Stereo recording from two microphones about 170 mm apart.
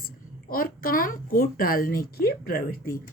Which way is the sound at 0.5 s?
55° left (ahead or behind).